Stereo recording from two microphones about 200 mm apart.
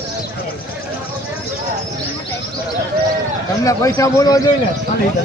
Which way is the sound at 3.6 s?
15° left (ahead or behind).